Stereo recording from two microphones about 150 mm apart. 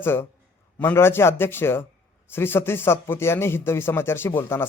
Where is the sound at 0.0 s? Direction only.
15° left (ahead or behind).